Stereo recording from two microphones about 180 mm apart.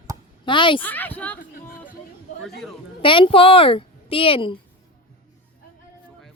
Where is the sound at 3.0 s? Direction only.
30° left (ahead or behind).